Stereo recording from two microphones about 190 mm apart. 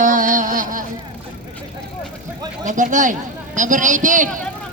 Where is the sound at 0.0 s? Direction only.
45° right (ahead or behind).